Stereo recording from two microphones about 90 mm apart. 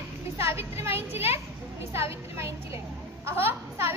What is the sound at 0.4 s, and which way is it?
A child's voice, 30° right (ahead or behind).